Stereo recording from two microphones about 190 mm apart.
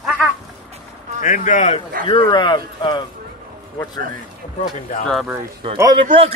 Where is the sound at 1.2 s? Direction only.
40° left (ahead or behind).